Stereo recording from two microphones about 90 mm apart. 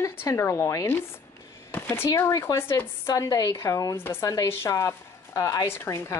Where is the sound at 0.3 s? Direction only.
35° left (ahead or behind).